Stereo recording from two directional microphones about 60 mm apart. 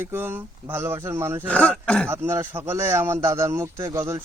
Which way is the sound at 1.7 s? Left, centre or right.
Centre.